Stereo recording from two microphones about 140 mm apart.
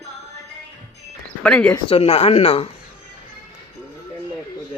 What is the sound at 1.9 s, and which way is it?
Speech, 45° left (ahead or behind).